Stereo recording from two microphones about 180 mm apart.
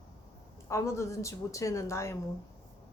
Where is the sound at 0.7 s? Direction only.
15° left (ahead or behind).